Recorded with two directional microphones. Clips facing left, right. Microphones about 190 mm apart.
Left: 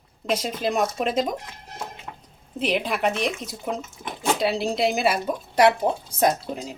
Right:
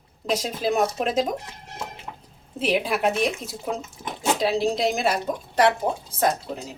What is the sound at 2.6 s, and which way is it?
Speech, 5° right (ahead or behind).